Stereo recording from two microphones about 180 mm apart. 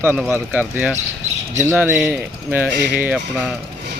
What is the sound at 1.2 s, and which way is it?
Squawk, 40° right (ahead or behind).